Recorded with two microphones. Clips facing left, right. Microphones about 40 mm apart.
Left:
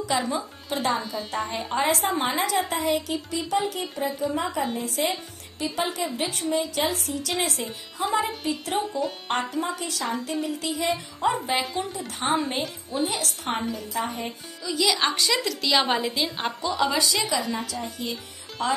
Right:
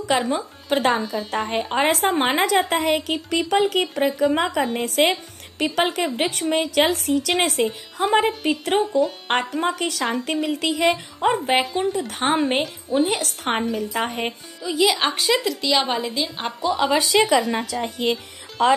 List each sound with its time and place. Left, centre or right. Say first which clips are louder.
0.1 s a woman's voice: right 6 dB; right
14.6 s a woman's voice: right 4 dB; right
15.4 s a woman's voice: right 2 dB; centre
16.6 s a woman's voice: right 4 dB; centre
16.9 s a woman's voice: right 7 dB; right
17.3 s a woman's voice: right 7 dB; right
18.6 s a woman's voice: right 8 dB; right